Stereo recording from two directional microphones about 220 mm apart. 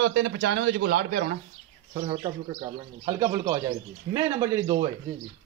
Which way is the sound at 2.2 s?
20° right (ahead or behind).